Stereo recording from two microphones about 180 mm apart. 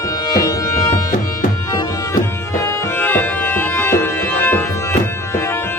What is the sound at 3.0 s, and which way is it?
Music, 10° left (ahead or behind).